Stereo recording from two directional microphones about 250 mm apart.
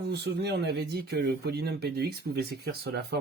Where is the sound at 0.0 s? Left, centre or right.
Right.